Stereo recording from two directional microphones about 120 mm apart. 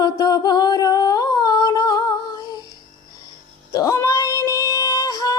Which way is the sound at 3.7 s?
25° left (ahead or behind).